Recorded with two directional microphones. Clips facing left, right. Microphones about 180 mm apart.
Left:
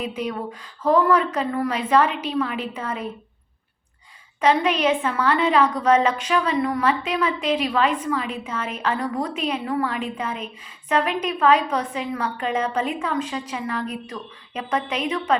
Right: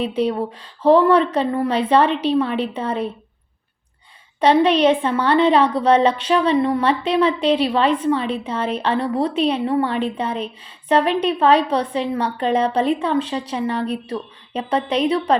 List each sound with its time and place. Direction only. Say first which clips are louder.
0.0 s a woman's voice: right 7 dB; 30° right (ahead or behind)
4.4 s a woman's voice: right 5 dB; 30° right (ahead or behind)